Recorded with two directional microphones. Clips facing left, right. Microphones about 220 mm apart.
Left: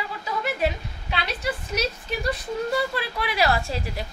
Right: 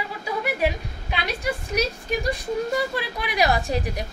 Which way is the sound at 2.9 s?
15° right (ahead or behind).